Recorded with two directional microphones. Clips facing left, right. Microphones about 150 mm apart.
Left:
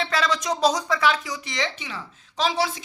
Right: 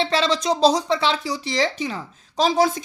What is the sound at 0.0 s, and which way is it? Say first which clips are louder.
Speech: right 4 dB; 30° right (ahead or behind).